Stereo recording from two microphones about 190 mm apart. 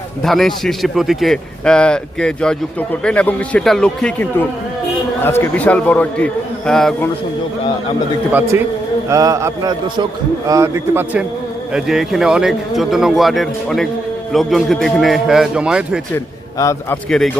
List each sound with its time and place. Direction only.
0.2 s a man's voice: centre (ahead or behind)
8.3 s a man's voice: 10° right (ahead or behind)
16.1 s a man's voice: 15° left (ahead or behind)
17.1 s a man's voice: 5° left (ahead or behind)